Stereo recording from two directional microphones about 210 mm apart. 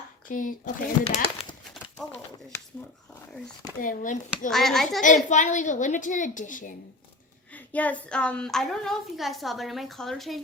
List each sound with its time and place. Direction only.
0.3 s a woman's voice: 40° left (ahead or behind)
1.0 s speech: 25° left (ahead or behind)
3.8 s a woman's voice: 40° left (ahead or behind)
4.4 s a child's voice: centre (ahead or behind)
5.0 s a woman's voice: 35° left (ahead or behind)
7.5 s a child's voice: 5° left (ahead or behind)